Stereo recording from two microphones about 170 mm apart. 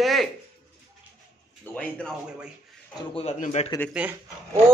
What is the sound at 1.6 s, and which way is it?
Speech, 5° left (ahead or behind).